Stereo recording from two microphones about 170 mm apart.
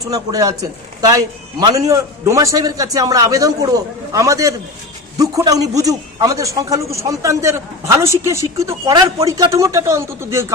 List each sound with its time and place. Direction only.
0.0 s a man's voice: 20° right (ahead or behind)